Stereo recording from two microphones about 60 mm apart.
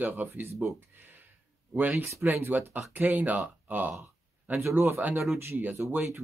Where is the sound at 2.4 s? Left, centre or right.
Right.